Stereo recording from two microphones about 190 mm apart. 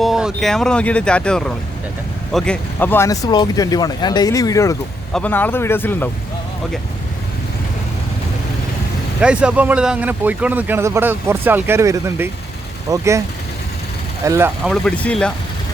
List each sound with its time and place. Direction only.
0.0 s speech: centre (ahead or behind)
9.2 s speech: 5° right (ahead or behind)
14.3 s speech: 15° right (ahead or behind)
14.7 s speech: 5° left (ahead or behind)